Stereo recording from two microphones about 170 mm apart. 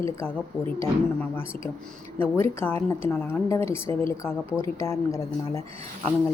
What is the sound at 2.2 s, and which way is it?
A woman's voice, 15° left (ahead or behind).